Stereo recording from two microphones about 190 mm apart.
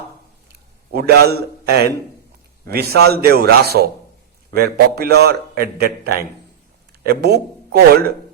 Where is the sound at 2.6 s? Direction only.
55° right (ahead or behind).